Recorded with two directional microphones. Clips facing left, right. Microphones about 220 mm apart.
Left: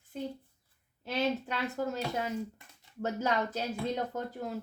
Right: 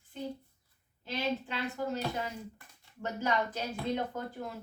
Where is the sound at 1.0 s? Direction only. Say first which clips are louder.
Left 3 dB; 45° left (ahead or behind).